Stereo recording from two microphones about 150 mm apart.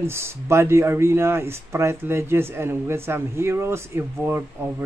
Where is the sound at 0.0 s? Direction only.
15° right (ahead or behind).